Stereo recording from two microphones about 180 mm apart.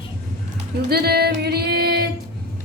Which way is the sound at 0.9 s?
60° right (ahead or behind).